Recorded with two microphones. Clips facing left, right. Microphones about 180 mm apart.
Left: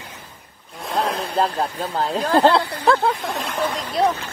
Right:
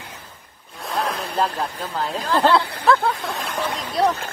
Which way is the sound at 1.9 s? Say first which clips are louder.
Left 4 dB; 50° left (ahead or behind).